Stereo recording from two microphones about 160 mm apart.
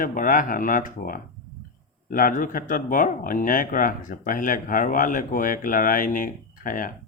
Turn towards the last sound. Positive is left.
turn(degrees=55)  # may be behind; listen again after turning